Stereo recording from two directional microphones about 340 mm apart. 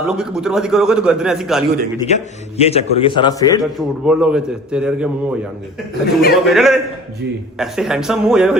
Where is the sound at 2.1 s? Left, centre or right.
Centre.